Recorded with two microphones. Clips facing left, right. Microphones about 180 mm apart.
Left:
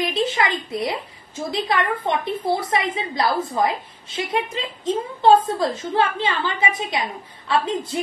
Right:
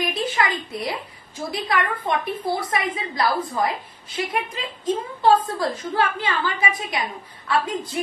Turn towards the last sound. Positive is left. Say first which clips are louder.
# left 2 dB
turn(degrees=25)  # may be behind; listen again after turning